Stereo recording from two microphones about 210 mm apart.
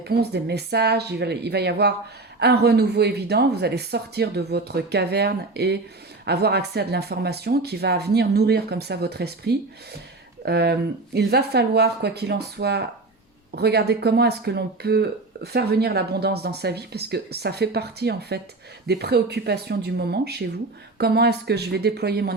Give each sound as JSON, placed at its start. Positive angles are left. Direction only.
{"t": 0.1, "sound": "speech", "side_deg": -50}